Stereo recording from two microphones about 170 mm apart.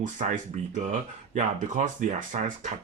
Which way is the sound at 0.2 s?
40° right (ahead or behind).